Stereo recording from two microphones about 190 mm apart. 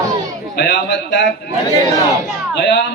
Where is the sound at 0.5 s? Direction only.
60° left (ahead or behind).